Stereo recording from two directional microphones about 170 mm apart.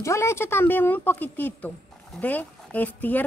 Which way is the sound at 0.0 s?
15° left (ahead or behind).